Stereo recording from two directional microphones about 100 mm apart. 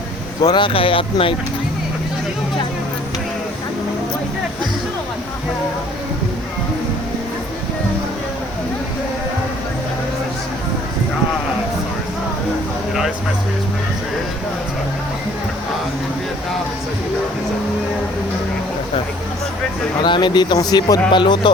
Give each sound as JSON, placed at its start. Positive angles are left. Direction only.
{"t": 0.4, "sound": "speech", "side_deg": 50}
{"t": 20.0, "sound": "speech", "side_deg": 50}